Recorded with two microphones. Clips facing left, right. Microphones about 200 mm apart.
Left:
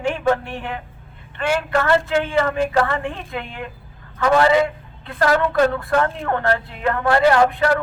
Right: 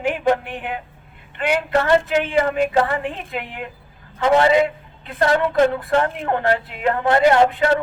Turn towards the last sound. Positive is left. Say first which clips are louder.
# right 1 dB
turn(degrees=-20)  # may be behind; listen again after turning